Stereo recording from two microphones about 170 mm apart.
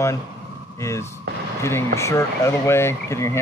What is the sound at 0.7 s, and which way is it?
Speech, 15° left (ahead or behind).